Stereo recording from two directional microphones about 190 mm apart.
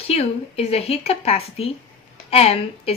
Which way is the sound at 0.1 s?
35° left (ahead or behind).